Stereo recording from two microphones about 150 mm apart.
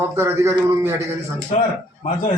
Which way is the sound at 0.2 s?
15° right (ahead or behind).